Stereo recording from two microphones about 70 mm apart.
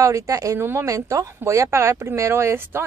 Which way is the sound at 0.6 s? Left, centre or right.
Right.